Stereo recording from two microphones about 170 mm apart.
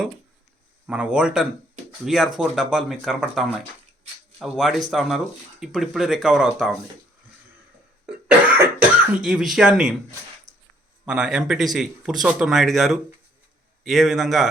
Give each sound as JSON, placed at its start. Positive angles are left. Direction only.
{"t": 0.9, "sound": "speech", "side_deg": -5}
{"t": 8.3, "sound": "speech", "side_deg": -10}
{"t": 10.5, "sound": "a sound", "side_deg": -20}
{"t": 11.0, "sound": "speech", "side_deg": -5}